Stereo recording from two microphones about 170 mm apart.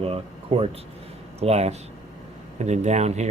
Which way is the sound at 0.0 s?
35° right (ahead or behind).